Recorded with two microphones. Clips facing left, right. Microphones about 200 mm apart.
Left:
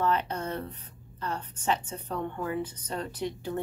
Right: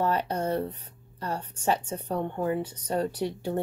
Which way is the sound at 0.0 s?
35° right (ahead or behind).